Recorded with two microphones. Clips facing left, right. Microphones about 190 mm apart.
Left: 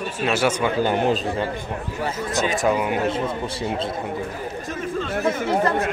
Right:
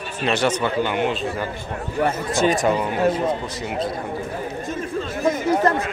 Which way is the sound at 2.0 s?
50° right (ahead or behind).